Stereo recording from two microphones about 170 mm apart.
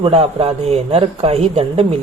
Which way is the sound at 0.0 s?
35° right (ahead or behind).